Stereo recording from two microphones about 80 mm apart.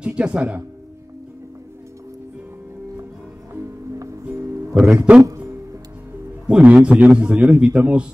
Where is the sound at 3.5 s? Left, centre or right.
Right.